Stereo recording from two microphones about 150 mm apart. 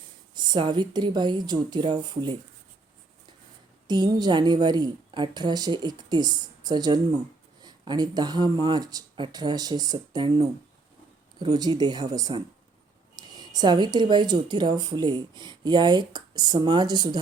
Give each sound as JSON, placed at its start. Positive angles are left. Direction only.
{"t": 0.3, "sound": "speech", "side_deg": -30}
{"t": 3.8, "sound": "speech", "side_deg": -25}
{"t": 11.5, "sound": "speech", "side_deg": -30}